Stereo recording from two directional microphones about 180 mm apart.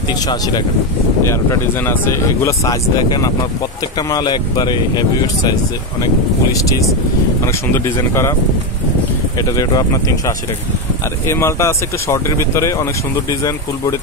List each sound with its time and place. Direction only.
0.3 s speech: 25° left (ahead or behind)
7.4 s speech: 15° left (ahead or behind)
9.4 s speech: 20° left (ahead or behind)
11.2 s speech: 15° left (ahead or behind)